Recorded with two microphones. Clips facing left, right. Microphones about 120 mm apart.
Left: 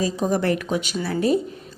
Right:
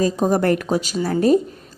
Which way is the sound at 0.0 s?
45° right (ahead or behind).